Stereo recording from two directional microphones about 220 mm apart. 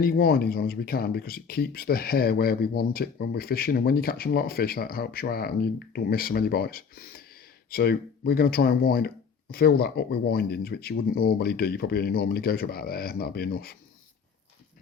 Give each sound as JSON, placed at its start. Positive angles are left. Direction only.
{"t": 0.0, "sound": "speech", "side_deg": 45}